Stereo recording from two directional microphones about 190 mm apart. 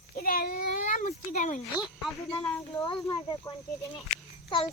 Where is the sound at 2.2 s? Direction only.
30° left (ahead or behind).